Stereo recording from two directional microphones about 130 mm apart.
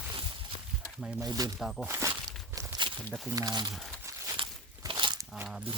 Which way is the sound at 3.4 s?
30° right (ahead or behind).